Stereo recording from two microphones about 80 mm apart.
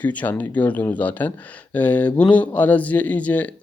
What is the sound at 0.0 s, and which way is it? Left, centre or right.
Speech, centre.